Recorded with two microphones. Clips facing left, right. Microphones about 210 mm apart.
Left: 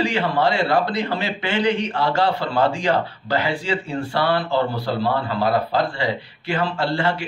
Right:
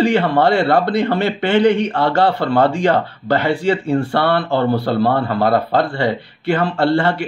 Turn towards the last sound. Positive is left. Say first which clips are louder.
# right 6 dB
turn(degrees=-60)  # may be behind; listen again after turning